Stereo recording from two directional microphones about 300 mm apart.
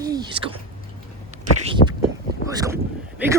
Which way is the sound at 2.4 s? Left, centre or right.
Centre.